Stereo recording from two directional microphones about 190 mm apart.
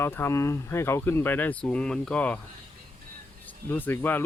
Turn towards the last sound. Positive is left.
turn(degrees=10)  # may be behind; listen again after turning